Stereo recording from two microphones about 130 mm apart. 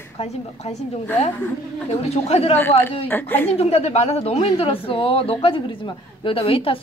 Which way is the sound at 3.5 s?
50° left (ahead or behind).